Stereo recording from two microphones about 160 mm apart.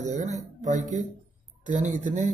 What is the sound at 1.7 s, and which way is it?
Speech, 50° right (ahead or behind).